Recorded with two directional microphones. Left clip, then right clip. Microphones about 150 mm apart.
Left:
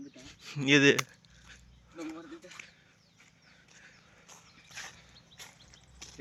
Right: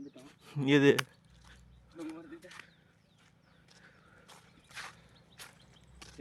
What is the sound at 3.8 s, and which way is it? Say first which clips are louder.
Horse: left 1 dB; 30° right (ahead or behind).